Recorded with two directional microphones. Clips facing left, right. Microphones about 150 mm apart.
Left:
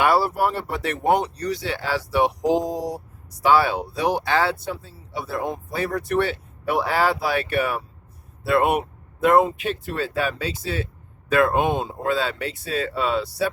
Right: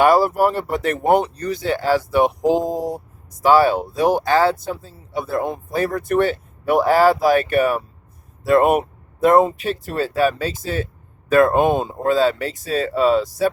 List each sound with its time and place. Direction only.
0.0 s speech: 45° right (ahead or behind)